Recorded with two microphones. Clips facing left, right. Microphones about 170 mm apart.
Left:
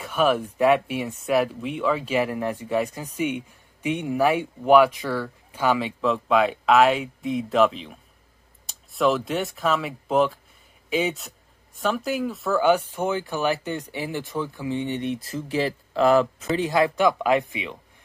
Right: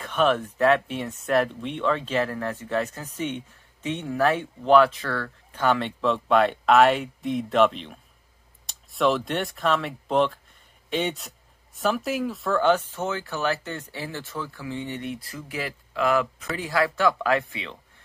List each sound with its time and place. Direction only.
0.0 s speech: 10° left (ahead or behind)